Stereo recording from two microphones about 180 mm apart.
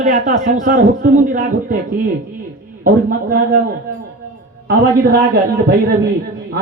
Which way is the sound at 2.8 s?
55° right (ahead or behind).